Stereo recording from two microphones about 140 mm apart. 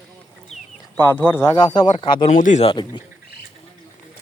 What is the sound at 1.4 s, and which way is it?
Speech, 30° left (ahead or behind).